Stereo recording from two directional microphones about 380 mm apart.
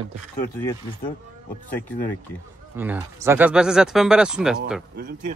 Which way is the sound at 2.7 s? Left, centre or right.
Centre.